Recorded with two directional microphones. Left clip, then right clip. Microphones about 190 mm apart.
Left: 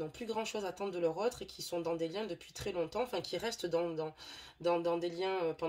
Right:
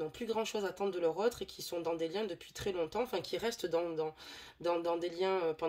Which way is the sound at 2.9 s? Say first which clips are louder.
Right 1 dB; 40° right (ahead or behind).